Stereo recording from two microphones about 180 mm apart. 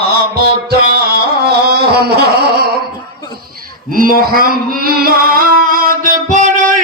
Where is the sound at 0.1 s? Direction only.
60° right (ahead or behind).